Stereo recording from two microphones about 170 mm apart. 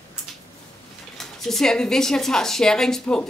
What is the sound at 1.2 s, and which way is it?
Speech, centre (ahead or behind).